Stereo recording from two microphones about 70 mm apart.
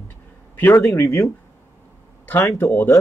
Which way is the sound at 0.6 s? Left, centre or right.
Left.